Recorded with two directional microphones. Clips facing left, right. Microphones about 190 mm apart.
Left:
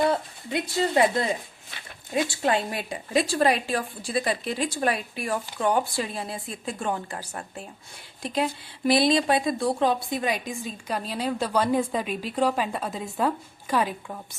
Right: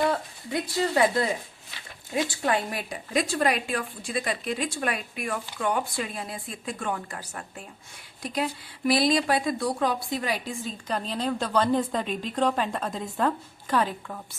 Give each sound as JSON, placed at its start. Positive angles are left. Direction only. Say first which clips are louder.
{"t": 0.1, "sound": "speech", "louder": "left 2 dB", "side_deg": 20}
{"t": 2.4, "sound": "a woman's voice", "louder": "left 2 dB", "side_deg": 25}